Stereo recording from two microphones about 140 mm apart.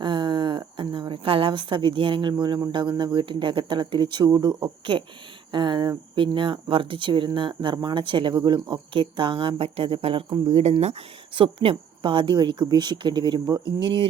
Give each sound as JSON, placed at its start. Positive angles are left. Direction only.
{"t": 0.0, "sound": "a woman's voice", "side_deg": -35}